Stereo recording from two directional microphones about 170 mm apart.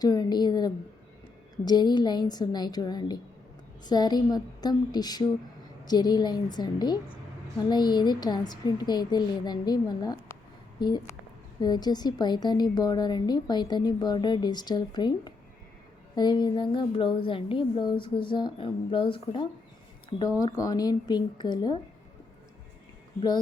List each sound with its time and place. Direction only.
0.0 s a woman's voice: 25° left (ahead or behind)